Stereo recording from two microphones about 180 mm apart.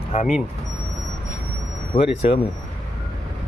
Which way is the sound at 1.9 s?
30° left (ahead or behind).